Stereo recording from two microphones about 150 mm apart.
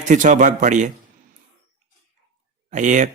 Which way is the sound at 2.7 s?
55° right (ahead or behind).